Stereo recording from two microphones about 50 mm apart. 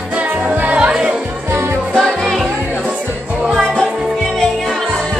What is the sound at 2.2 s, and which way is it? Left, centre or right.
Music, centre.